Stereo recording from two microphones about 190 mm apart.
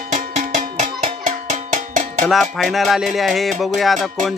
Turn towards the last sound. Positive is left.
turn(degrees=0)  # may be behind; listen again after turning